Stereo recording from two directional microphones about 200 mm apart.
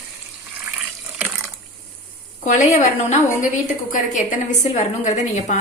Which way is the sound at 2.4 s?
35° left (ahead or behind).